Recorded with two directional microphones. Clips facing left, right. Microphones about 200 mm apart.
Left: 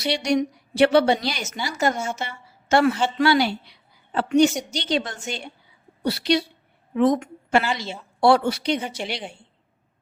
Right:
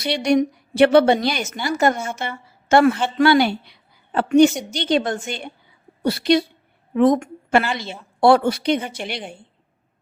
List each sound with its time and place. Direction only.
0.0 s a woman's voice: 55° right (ahead or behind)